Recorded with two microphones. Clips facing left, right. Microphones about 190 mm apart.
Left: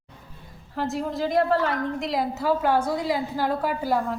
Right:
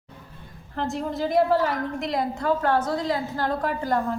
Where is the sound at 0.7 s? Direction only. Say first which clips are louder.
Even; centre (ahead or behind).